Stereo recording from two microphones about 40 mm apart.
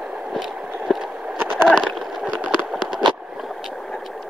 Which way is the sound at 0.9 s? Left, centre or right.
Centre.